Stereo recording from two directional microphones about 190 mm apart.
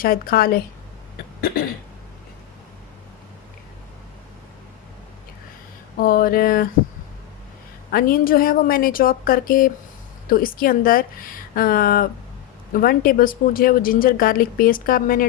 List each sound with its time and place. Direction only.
0.0 s speech: 50° left (ahead or behind)
1.4 s cough: 50° left (ahead or behind)
6.0 s speech: 50° left (ahead or behind)
7.9 s speech: 50° left (ahead or behind)